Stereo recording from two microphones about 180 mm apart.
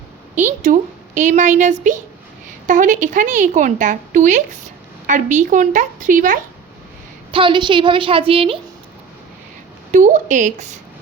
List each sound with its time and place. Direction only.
0.3 s a woman's voice: 45° right (ahead or behind)
7.3 s a woman's voice: 30° right (ahead or behind)
9.9 s a woman's voice: 45° right (ahead or behind)